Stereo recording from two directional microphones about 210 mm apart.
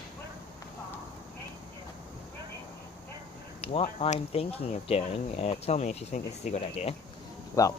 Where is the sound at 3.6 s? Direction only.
30° left (ahead or behind).